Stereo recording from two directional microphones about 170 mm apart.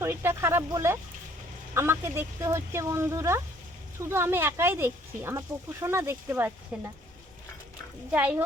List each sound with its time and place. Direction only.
0.0 s a woman's voice: 15° right (ahead or behind)
8.1 s a woman's voice: 5° right (ahead or behind)